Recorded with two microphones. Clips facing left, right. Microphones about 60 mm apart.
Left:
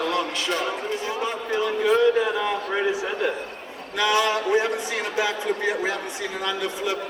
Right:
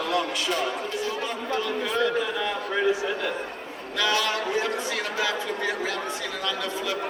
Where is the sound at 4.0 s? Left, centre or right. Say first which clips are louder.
Left 4 dB; left.